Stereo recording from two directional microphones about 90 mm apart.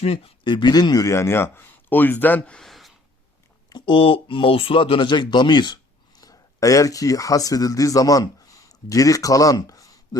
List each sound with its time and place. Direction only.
0.1 s speech: 85° left; by 2.6 s 20° left (ahead or behind)
2.6 s a sound: centre (ahead or behind)
3.7 s speech: 60° left (ahead or behind); by 10.2 s 40° left (ahead or behind)